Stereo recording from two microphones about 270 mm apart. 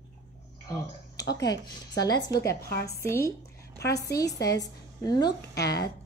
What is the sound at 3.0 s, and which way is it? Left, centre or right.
A woman's voice, centre.